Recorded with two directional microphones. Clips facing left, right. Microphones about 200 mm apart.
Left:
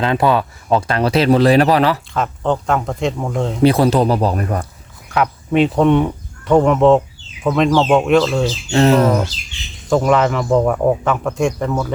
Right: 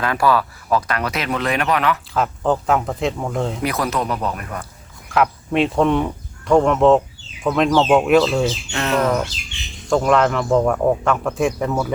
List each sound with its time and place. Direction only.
0.0 s speech: 25° left (ahead or behind)
2.1 s speech: centre (ahead or behind)
3.6 s speech: 30° left (ahead or behind)
5.0 s speech: centre (ahead or behind)
8.7 s speech: 30° left (ahead or behind)
9.9 s speech: centre (ahead or behind)